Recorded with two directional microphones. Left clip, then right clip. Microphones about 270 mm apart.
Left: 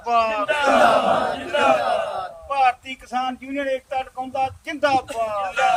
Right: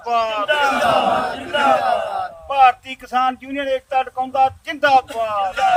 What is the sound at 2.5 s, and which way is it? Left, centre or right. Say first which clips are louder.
Speech: right 6 dB; centre.